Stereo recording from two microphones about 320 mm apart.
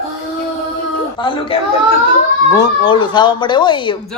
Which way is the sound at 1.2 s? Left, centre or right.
Centre.